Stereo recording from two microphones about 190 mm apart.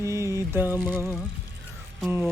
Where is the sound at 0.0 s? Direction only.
15° right (ahead or behind).